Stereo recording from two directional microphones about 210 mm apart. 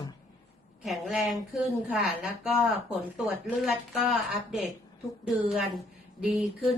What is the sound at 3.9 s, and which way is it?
A woman's voice, centre (ahead or behind).